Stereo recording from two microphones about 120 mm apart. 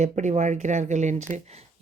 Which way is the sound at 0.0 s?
75° right (ahead or behind).